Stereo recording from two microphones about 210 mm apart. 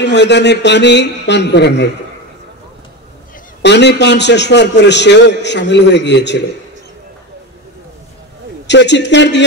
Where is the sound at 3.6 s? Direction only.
55° left (ahead or behind).